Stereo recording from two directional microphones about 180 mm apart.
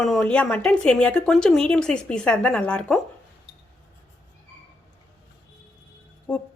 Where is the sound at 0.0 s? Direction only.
Centre (ahead or behind).